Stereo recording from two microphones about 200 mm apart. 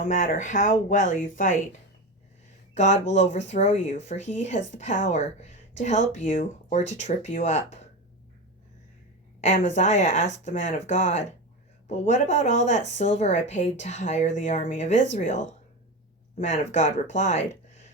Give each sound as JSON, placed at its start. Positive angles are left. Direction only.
{"t": 0.0, "sound": "speech", "side_deg": 40}
{"t": 2.7, "sound": "speech", "side_deg": 35}
{"t": 9.4, "sound": "speech", "side_deg": 35}